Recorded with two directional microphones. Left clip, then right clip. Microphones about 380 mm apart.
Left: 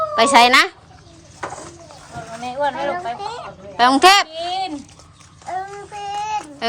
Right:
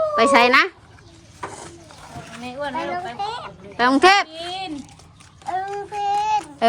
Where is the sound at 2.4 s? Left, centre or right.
Left.